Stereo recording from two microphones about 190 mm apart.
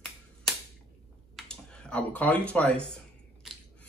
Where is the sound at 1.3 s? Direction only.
5° left (ahead or behind).